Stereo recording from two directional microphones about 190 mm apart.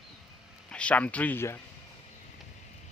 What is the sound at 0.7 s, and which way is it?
Speech, 5° left (ahead or behind).